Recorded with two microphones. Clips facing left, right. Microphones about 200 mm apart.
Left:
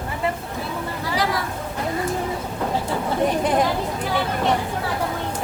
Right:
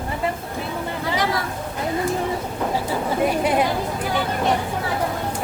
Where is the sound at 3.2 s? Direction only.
10° right (ahead or behind).